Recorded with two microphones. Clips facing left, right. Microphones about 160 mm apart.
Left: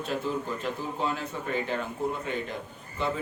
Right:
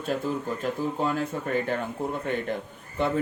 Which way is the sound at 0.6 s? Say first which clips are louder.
Right 4 dB; 45° right (ahead or behind).